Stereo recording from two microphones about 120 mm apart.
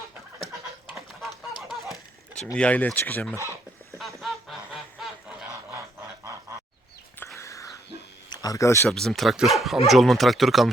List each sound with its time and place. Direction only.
0.9 s chicken: centre (ahead or behind)
2.6 s speech: 10° left (ahead or behind)
3.9 s goose: centre (ahead or behind)
7.3 s a sound: 25° left (ahead or behind)
8.3 s speech: 30° left (ahead or behind)
8.9 s speech: 5° left (ahead or behind)